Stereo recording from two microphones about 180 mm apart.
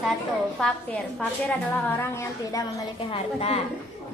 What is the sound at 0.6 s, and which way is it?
Speech, 5° left (ahead or behind).